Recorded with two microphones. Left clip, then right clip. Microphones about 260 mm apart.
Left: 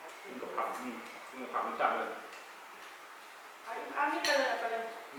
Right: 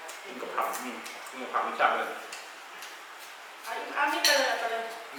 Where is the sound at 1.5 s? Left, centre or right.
Centre.